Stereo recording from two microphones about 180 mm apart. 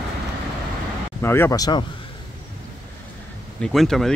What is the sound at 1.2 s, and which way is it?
Speech, 10° left (ahead or behind).